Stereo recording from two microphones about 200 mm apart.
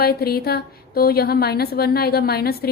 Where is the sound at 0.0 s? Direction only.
50° left (ahead or behind).